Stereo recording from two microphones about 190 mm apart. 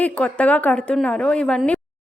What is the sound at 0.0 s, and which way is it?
A woman's voice, 5° left (ahead or behind).